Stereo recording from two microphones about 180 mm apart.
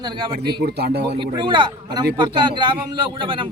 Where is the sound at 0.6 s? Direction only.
65° right (ahead or behind).